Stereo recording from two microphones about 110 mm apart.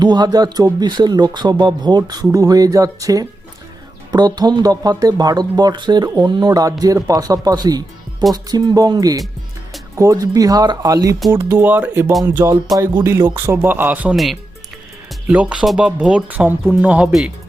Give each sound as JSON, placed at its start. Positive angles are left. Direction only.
{"t": 0.0, "sound": "speech", "side_deg": -40}
{"t": 15.3, "sound": "speech", "side_deg": -10}
{"t": 17.1, "sound": "speech", "side_deg": 0}